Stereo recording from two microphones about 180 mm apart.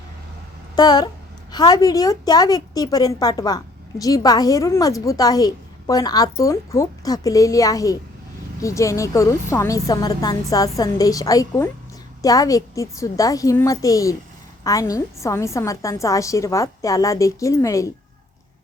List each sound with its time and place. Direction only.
0.8 s a woman's voice: 20° left (ahead or behind)